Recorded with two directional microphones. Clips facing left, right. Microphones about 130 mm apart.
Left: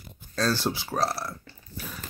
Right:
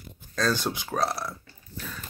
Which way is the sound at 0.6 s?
5° left (ahead or behind).